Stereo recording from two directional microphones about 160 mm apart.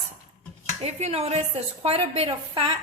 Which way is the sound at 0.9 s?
40° right (ahead or behind).